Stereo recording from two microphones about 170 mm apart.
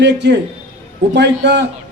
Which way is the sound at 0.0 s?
90° right.